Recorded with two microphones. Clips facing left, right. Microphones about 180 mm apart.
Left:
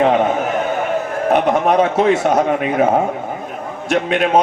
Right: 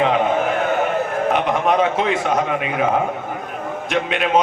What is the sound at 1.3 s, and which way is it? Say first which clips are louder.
A man's voice: left 6 dB; 45° left (ahead or behind).